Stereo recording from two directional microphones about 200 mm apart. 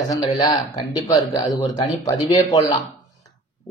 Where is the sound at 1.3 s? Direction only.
20° left (ahead or behind).